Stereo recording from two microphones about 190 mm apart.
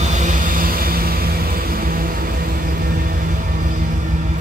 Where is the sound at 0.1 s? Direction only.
40° right (ahead or behind).